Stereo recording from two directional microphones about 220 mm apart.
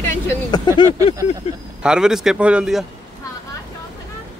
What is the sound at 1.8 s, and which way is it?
A man's voice, 5° right (ahead or behind).